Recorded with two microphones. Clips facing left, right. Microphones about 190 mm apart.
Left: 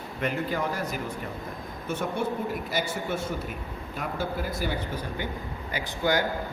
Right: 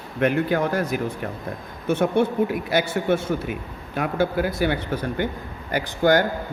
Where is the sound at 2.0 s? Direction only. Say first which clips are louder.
Right 9 dB; 70° right (ahead or behind).